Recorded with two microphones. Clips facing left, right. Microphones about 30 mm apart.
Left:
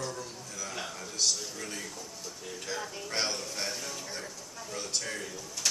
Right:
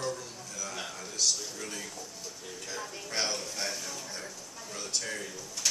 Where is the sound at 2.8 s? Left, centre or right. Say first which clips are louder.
Right 1 dB; centre.